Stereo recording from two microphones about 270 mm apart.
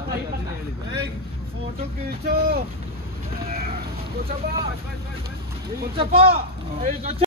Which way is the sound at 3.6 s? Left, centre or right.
Right.